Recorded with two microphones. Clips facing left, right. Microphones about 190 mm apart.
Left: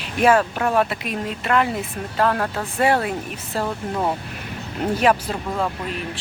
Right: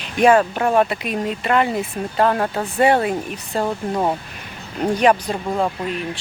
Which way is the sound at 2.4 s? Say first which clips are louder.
Right 3 dB; 15° right (ahead or behind).